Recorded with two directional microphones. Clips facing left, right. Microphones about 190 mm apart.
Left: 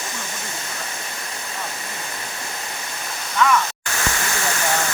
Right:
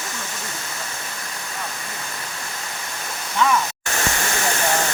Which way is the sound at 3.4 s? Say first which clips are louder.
Left 1 dB; 30° right (ahead or behind).